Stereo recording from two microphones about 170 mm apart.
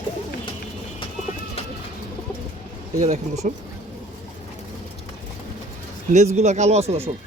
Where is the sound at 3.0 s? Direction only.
40° right (ahead or behind).